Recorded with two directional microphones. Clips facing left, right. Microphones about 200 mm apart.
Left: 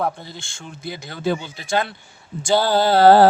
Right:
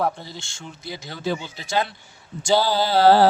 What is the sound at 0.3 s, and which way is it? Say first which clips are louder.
Speech: left 1 dB; 55° left (ahead or behind).